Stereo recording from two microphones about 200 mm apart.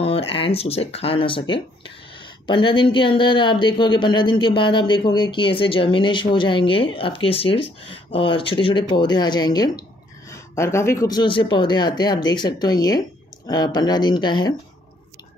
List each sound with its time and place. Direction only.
0.0 s speech: 30° left (ahead or behind)